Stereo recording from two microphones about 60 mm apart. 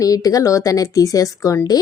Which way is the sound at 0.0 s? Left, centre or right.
Left.